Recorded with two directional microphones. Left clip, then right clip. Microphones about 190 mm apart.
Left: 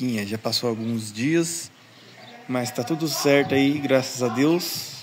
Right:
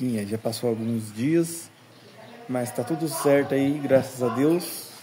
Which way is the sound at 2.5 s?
20° left (ahead or behind).